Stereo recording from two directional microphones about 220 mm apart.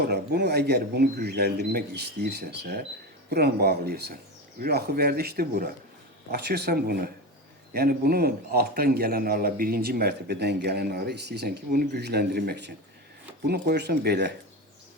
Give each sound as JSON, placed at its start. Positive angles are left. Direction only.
{"t": 0.1, "sound": "a man's voice", "side_deg": -50}